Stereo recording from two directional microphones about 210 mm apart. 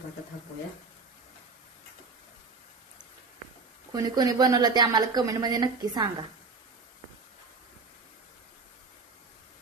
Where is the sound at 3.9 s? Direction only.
20° right (ahead or behind).